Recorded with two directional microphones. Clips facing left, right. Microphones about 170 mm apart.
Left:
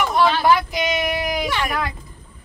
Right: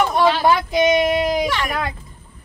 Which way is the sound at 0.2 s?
20° right (ahead or behind).